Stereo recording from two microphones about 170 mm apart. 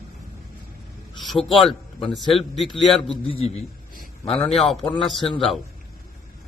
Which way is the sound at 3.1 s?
30° left (ahead or behind).